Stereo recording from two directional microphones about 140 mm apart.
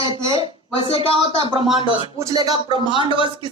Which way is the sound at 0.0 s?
40° left (ahead or behind).